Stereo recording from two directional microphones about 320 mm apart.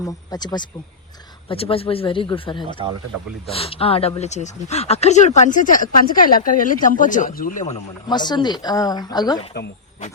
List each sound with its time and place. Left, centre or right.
0.0 s speech: centre